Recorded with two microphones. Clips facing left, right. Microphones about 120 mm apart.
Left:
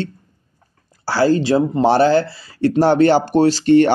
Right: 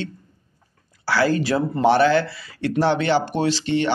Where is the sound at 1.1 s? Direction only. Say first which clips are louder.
Left 5 dB; 30° left (ahead or behind).